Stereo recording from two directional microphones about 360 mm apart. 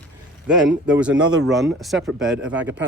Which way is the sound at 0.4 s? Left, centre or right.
Centre.